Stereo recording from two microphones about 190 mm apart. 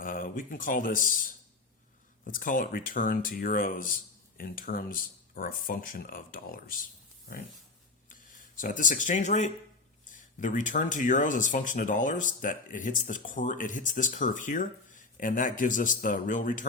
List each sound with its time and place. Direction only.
0.0 s speech: 45° left (ahead or behind)
8.1 s speech: 45° left (ahead or behind)